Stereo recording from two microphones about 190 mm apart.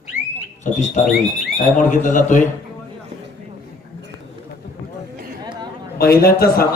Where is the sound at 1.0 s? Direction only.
40° left (ahead or behind).